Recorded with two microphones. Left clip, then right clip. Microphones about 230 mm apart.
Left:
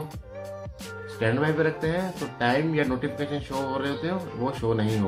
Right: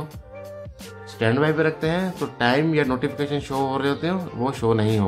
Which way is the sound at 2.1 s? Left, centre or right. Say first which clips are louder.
Right 5 dB; centre.